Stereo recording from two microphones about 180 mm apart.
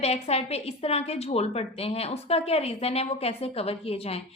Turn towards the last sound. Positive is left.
turn(degrees=35)  # may be behind; listen again after turning